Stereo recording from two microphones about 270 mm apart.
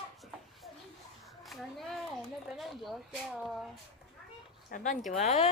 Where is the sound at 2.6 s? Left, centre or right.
Centre.